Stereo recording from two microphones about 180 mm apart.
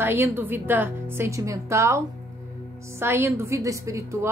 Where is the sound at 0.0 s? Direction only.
10° right (ahead or behind).